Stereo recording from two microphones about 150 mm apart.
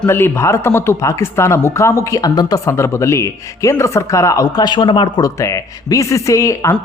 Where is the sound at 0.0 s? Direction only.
15° left (ahead or behind).